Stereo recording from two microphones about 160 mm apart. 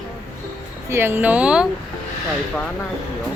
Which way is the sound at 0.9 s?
15° right (ahead or behind).